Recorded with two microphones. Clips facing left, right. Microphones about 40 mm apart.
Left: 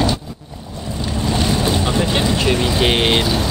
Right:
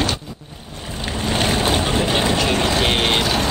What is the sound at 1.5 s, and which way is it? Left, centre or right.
Boat, right.